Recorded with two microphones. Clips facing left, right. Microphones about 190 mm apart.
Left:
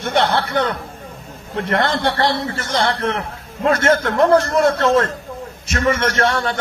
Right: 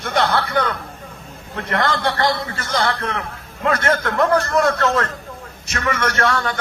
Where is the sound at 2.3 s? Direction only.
30° left (ahead or behind).